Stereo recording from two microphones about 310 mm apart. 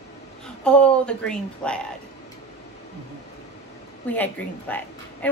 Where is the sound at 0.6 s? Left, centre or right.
Centre.